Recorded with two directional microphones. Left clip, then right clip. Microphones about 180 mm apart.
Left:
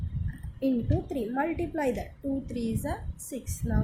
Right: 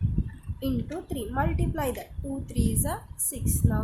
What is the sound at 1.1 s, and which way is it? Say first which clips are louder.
A woman's voice: right 2 dB; 5° right (ahead or behind).